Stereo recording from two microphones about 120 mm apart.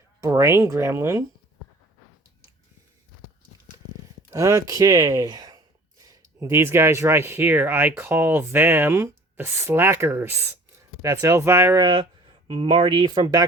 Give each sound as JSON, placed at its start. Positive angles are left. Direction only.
{"t": 0.2, "sound": "speech", "side_deg": -25}
{"t": 4.3, "sound": "speech", "side_deg": -25}
{"t": 11.8, "sound": "speech", "side_deg": -40}